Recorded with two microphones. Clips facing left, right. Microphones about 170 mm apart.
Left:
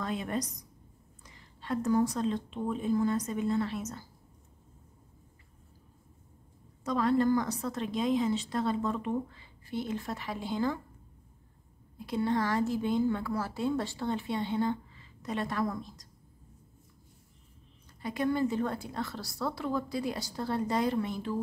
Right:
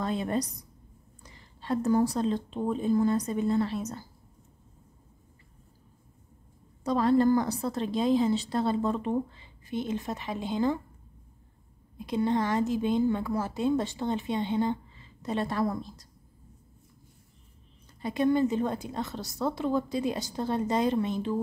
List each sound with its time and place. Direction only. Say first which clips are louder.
0.0 s a woman's voice: right 4 dB; 30° right (ahead or behind)
6.8 s a woman's voice: right 4 dB; 30° right (ahead or behind)
12.0 s a woman's voice: right 3 dB; 20° right (ahead or behind)
18.0 s a woman's voice: right 4 dB; 25° right (ahead or behind)